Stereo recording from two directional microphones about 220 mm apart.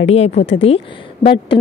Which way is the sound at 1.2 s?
45° left (ahead or behind).